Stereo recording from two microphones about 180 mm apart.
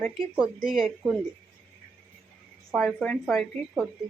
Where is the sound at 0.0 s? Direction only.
Centre (ahead or behind).